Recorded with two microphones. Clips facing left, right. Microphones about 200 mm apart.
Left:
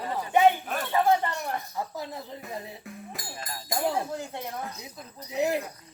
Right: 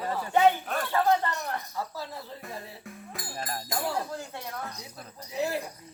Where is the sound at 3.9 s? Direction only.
20° left (ahead or behind).